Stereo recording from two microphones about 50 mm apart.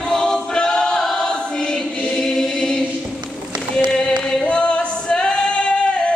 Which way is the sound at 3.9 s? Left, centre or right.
Centre.